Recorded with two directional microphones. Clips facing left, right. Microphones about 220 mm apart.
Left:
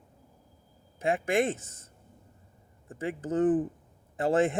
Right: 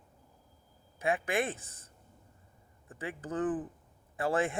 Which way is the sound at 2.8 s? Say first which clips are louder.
Left 7 dB; 25° left (ahead or behind).